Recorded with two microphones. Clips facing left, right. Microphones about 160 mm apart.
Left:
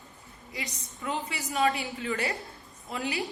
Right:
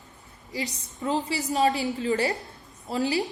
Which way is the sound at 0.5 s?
35° right (ahead or behind).